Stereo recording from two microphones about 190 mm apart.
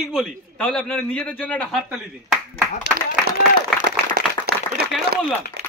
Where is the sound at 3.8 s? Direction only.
55° right (ahead or behind).